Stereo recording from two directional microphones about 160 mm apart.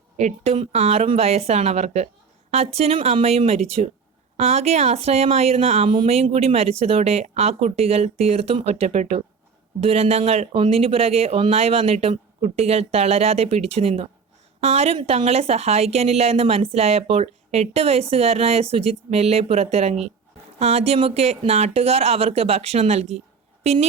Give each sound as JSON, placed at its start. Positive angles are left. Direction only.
{"t": 0.2, "sound": "a woman's voice", "side_deg": -45}